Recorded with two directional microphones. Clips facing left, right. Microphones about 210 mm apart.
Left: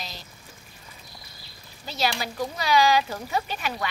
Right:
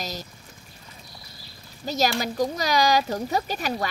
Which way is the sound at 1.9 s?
40° right (ahead or behind).